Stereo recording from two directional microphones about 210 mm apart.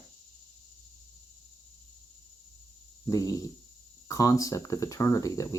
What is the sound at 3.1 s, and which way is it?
Speech, 15° left (ahead or behind).